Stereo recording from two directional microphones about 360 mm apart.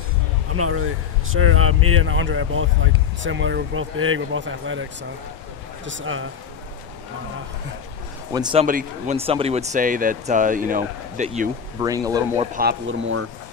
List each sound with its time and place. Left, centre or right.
0.5 s speech: right
5.9 s speech: right
8.3 s speech: centre
11.8 s speech: centre
12.5 s speech: right